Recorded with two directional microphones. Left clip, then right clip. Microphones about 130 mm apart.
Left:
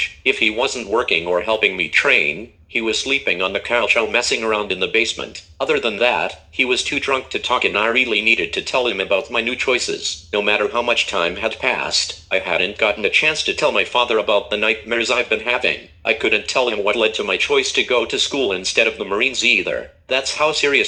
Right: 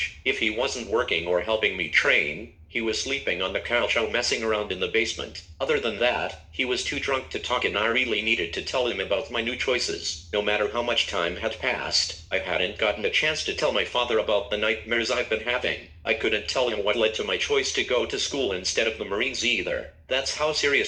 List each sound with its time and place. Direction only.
0.3 s speech: 40° left (ahead or behind)